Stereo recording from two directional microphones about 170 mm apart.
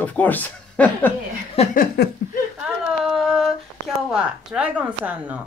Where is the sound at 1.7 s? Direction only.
55° left (ahead or behind).